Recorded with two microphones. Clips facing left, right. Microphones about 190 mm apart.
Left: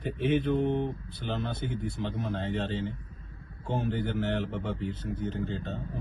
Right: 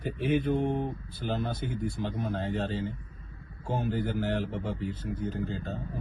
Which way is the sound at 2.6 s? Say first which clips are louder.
Even; centre (ahead or behind).